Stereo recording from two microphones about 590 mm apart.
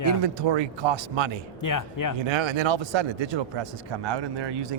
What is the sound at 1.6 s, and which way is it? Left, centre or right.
Speech, left.